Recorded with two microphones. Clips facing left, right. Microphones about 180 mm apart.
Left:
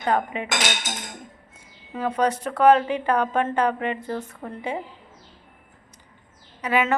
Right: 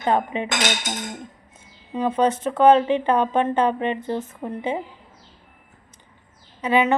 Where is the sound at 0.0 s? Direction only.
25° right (ahead or behind).